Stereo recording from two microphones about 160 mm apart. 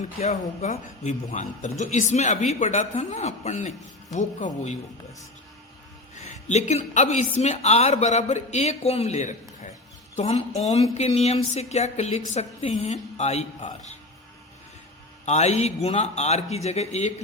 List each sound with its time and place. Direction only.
0.0 s speech: 45° left (ahead or behind)
6.1 s speech: 45° left (ahead or behind)
15.3 s speech: 45° left (ahead or behind)